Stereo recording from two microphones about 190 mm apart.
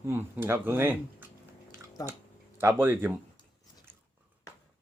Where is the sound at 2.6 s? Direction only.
10° right (ahead or behind).